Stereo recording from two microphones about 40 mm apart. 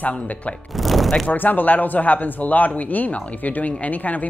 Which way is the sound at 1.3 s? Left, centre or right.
Left.